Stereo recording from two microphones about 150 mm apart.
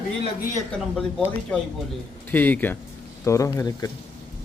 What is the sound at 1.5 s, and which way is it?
A man's voice, 5° left (ahead or behind).